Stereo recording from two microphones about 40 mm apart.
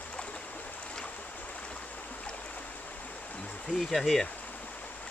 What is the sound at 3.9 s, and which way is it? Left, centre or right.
Speech, centre.